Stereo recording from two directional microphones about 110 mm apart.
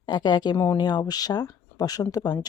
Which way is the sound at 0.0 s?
40° left (ahead or behind).